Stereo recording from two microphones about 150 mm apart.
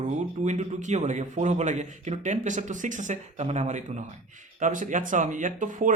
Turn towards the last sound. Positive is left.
turn(degrees=-60)  # may be behind; listen again after turning